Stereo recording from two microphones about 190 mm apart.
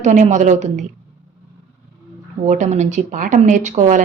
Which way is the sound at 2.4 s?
40° right (ahead or behind).